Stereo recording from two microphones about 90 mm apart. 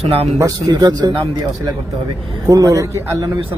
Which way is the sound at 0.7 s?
50° right (ahead or behind).